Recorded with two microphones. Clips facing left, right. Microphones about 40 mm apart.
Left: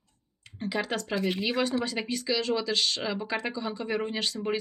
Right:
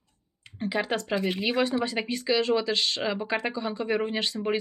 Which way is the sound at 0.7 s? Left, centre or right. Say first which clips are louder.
Right 2 dB; right.